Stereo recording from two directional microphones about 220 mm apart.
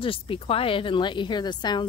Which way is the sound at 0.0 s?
25° left (ahead or behind).